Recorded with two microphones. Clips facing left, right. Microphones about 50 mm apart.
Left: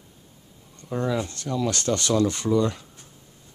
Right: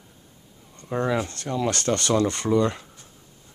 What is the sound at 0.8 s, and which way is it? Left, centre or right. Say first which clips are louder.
Speech: right 2 dB; right.